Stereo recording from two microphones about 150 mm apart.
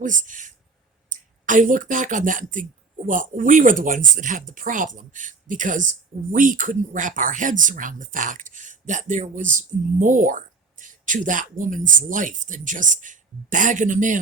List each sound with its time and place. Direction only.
0.0 s speech: 60° right (ahead or behind)